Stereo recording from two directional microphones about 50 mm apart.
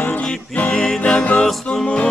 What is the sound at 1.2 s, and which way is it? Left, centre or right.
Music, left.